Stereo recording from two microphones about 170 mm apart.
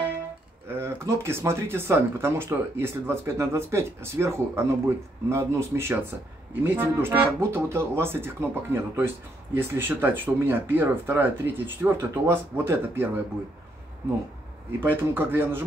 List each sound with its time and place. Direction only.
0.7 s speech: 15° right (ahead or behind)
14.8 s speech: 10° right (ahead or behind)